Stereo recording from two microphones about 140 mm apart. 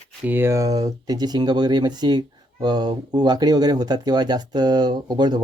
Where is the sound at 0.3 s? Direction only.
15° right (ahead or behind).